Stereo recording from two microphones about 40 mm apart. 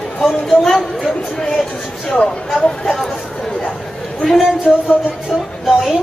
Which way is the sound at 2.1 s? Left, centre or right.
Centre.